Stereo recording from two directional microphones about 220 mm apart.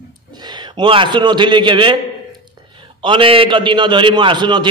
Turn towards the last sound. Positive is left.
turn(degrees=-20)  # may be behind; listen again after turning